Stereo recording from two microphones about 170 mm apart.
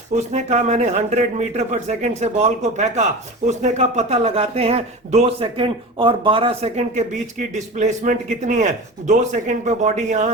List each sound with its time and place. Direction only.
0.1 s a man's voice: 45° right (ahead or behind)